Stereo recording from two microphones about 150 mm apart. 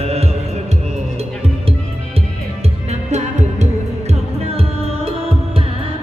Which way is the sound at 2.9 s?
50° right (ahead or behind).